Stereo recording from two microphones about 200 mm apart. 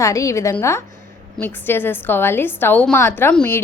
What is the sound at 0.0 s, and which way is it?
A woman's voice, 15° left (ahead or behind).